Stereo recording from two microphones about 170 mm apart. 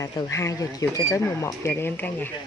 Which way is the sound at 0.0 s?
20° left (ahead or behind).